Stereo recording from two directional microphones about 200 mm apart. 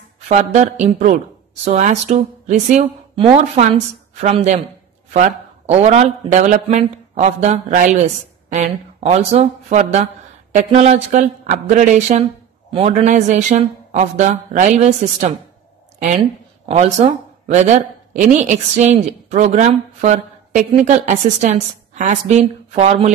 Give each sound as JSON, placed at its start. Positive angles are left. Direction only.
{"t": 0.3, "sound": "speech", "side_deg": -35}